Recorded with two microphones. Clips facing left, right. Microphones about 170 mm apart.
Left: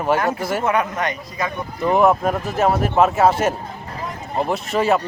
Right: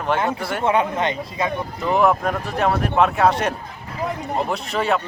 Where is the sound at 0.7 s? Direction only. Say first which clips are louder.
Right 4 dB; 25° right (ahead or behind).